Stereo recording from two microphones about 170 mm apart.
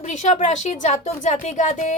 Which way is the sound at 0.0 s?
45° left (ahead or behind).